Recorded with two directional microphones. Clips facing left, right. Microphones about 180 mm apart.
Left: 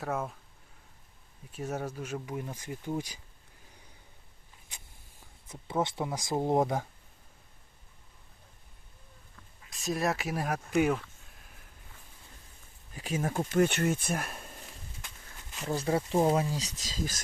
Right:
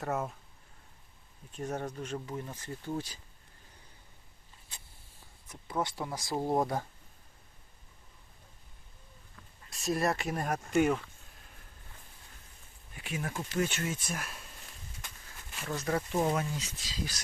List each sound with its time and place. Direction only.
0.0 s speech: centre (ahead or behind)
1.5 s speech: 5° left (ahead or behind)
5.5 s speech: 25° left (ahead or behind)
9.6 s speech: centre (ahead or behind)
12.9 s speech: 40° left (ahead or behind); by 14.4 s 55° left (ahead or behind)
15.5 s speech: 30° left (ahead or behind); by 17.2 s 45° left (ahead or behind)